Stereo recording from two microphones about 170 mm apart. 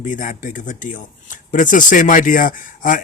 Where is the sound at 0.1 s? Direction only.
50° left (ahead or behind).